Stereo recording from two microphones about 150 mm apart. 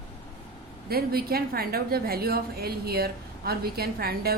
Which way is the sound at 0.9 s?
90° right.